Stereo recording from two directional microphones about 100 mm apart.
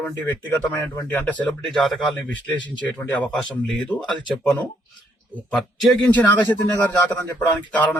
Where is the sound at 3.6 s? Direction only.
5° left (ahead or behind).